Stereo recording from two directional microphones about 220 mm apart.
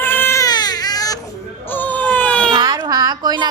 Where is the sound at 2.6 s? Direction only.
15° right (ahead or behind).